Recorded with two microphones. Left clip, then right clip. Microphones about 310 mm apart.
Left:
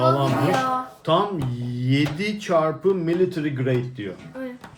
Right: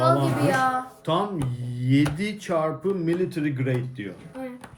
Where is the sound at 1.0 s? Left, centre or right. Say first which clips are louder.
Left 6 dB; centre.